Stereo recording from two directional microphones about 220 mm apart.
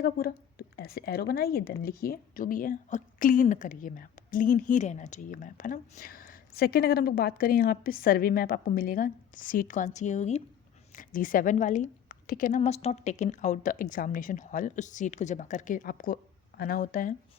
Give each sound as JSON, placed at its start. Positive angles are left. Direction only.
{"t": 0.0, "sound": "a woman's voice", "side_deg": 45}